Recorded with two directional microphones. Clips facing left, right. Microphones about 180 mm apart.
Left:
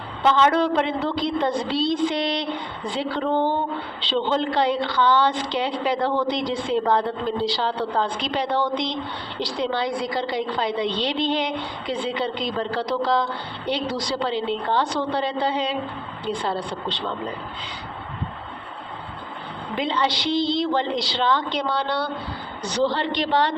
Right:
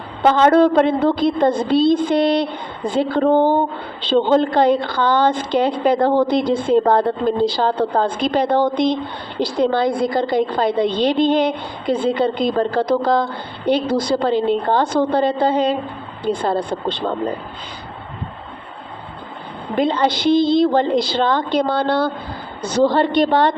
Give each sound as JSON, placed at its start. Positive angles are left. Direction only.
{"t": 0.2, "sound": "a woman's voice", "side_deg": -45}
{"t": 19.7, "sound": "a woman's voice", "side_deg": -50}